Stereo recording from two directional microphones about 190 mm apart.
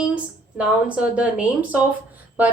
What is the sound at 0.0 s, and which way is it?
A woman's voice, 5° right (ahead or behind).